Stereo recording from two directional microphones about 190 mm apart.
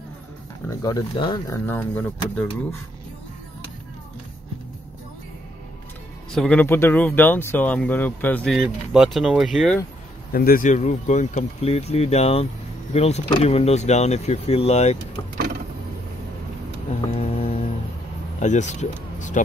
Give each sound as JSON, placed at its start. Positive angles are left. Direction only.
{"t": 0.7, "sound": "speech", "side_deg": 20}
{"t": 6.3, "sound": "speech", "side_deg": 5}
{"t": 10.3, "sound": "speech", "side_deg": 50}
{"t": 17.2, "sound": "music", "side_deg": 35}
{"t": 18.4, "sound": "speech", "side_deg": 40}